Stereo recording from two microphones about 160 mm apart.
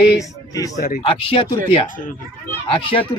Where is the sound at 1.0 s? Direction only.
35° left (ahead or behind).